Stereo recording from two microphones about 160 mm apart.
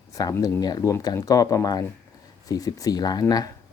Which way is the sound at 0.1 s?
20° left (ahead or behind).